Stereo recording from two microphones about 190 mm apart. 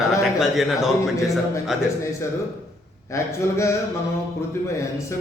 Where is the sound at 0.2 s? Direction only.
Centre (ahead or behind).